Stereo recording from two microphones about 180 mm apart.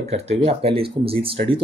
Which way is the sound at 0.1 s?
35° right (ahead or behind).